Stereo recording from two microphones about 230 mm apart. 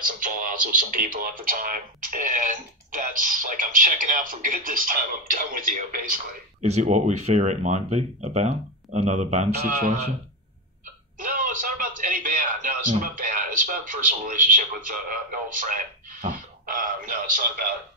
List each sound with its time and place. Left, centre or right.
0.2 s speech: right
11.1 s a man's voice: right